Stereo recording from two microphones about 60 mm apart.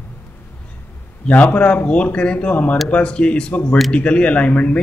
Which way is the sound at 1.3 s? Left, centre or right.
Left.